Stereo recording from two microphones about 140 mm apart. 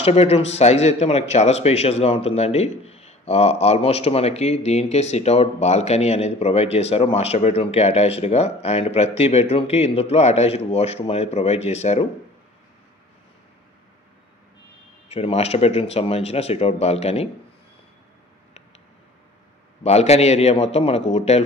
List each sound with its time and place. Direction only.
0.0 s speech: 45° left (ahead or behind)
15.0 s speech: 50° left (ahead or behind)
19.8 s speech: 50° left (ahead or behind)